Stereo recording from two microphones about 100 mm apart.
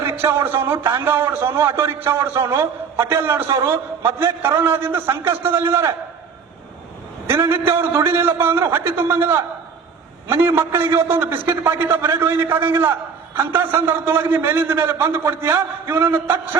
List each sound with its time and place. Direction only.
0.2 s a man's voice: 25° right (ahead or behind)
7.3 s a man's voice: 25° right (ahead or behind)